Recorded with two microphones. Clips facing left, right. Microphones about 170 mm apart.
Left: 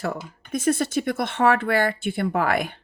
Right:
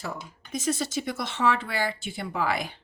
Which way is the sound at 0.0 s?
60° left (ahead or behind).